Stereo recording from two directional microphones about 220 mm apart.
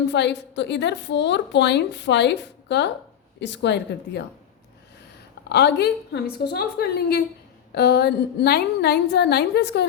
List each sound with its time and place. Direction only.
0.1 s a woman's voice: 50° left (ahead or behind)
5.5 s a woman's voice: 50° left (ahead or behind)